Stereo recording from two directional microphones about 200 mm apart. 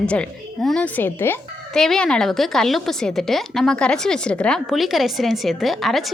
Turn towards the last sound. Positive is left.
turn(degrees=0)  # may be behind; listen again after turning